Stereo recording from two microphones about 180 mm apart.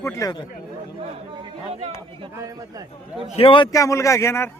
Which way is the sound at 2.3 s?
20° right (ahead or behind).